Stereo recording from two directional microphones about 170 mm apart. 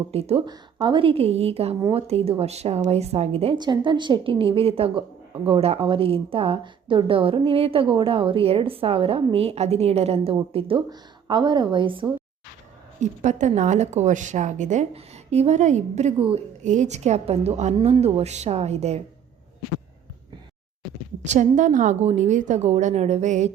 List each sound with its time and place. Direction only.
0.1 s a woman's voice: 35° right (ahead or behind)
0.4 s a woman's voice: 25° right (ahead or behind)
13.0 s a woman's voice: 45° right (ahead or behind)
21.2 s speech: 45° right (ahead or behind)